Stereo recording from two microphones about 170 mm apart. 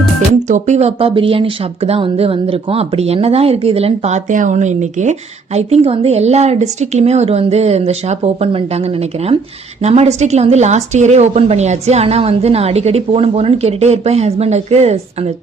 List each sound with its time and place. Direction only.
0.4 s a woman's voice: 45° right (ahead or behind)